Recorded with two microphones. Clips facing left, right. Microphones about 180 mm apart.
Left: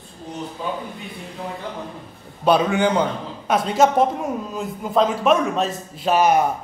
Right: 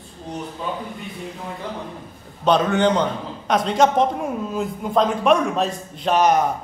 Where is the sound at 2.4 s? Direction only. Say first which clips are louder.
Even; 10° left (ahead or behind).